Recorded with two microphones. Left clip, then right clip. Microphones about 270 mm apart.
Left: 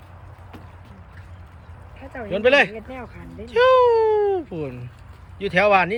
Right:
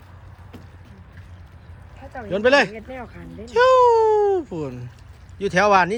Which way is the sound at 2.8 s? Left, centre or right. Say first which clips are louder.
Right 1 dB; right.